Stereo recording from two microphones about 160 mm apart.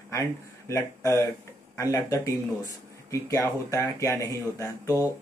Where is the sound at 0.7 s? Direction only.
20° left (ahead or behind).